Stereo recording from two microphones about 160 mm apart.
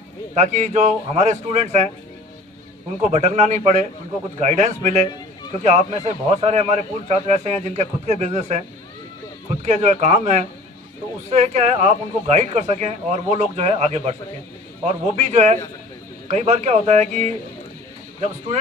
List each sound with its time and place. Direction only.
0.3 s speech: 45° right (ahead or behind)
3.0 s speech: 45° right (ahead or behind)
9.7 s speech: 45° right (ahead or behind)